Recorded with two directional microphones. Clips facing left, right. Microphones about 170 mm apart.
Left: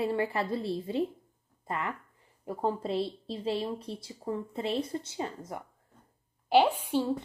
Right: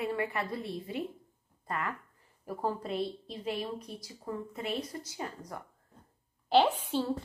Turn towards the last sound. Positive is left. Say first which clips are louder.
# left 2 dB
turn(degrees=10)  # may be behind; listen again after turning